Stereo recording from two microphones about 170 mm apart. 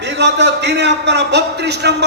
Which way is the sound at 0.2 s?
90° right.